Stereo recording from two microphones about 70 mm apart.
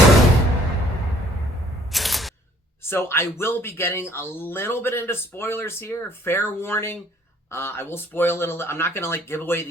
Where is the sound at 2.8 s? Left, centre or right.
Left.